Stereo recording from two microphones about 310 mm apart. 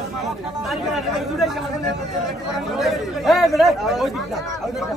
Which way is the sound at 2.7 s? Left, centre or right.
Centre.